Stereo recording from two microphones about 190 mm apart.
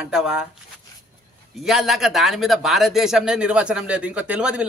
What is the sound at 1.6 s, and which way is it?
A man's voice, centre (ahead or behind).